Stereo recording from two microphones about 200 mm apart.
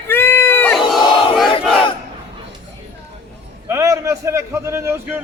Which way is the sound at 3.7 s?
15° right (ahead or behind).